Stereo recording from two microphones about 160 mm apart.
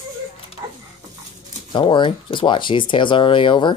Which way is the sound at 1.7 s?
30° left (ahead or behind).